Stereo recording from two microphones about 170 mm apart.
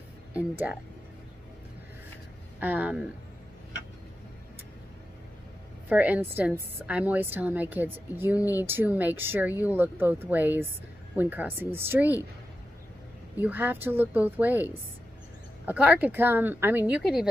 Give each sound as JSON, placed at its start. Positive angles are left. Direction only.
{"t": 0.3, "sound": "a woman's voice", "side_deg": -10}
{"t": 2.6, "sound": "a woman's voice", "side_deg": -10}
{"t": 5.9, "sound": "a woman's voice", "side_deg": -10}
{"t": 13.4, "sound": "a woman's voice", "side_deg": -10}